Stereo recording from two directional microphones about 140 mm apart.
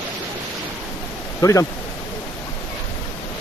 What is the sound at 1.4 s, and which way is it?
Speech, 25° left (ahead or behind).